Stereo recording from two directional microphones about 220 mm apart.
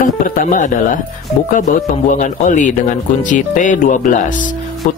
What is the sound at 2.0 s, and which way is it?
Speech, 35° left (ahead or behind).